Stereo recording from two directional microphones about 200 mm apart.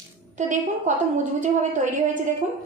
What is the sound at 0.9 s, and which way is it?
Speech, 35° right (ahead or behind).